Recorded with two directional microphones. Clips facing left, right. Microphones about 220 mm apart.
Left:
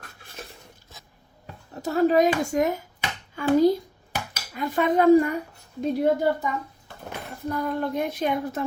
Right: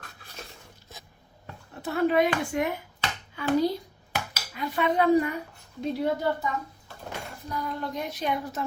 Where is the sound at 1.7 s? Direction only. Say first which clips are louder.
Left 4 dB; 40° left (ahead or behind).